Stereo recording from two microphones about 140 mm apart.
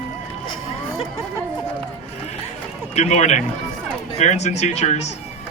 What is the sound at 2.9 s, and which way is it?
Speech, 50° left (ahead or behind).